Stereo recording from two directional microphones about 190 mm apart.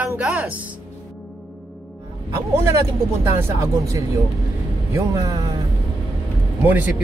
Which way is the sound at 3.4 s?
15° right (ahead or behind).